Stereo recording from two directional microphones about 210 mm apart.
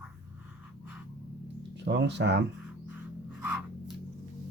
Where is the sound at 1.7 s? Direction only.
55° right (ahead or behind).